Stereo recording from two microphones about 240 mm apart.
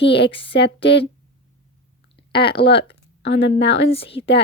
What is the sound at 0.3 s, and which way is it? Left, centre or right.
Speech, left.